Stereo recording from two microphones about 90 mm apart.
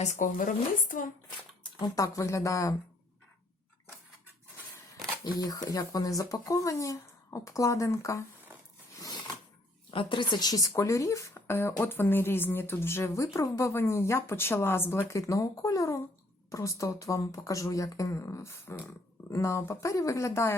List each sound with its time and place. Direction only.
1.6 s a sound: 50° left (ahead or behind)
2.1 s speech: 35° left (ahead or behind)
5.4 s speech: 45° left (ahead or behind)
9.0 s a sound: 50° left (ahead or behind)
9.9 s speech: 65° left (ahead or behind); by 10.7 s 45° left (ahead or behind)
10.8 s speech: 35° left (ahead or behind)
11.3 s speech: 25° left (ahead or behind)